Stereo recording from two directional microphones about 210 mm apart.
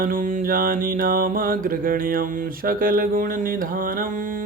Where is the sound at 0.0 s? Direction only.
40° right (ahead or behind).